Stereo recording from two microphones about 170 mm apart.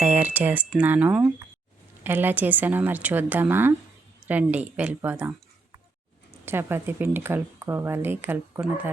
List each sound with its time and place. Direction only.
0.0 s speech: 10° right (ahead or behind)
6.4 s speech: 15° right (ahead or behind)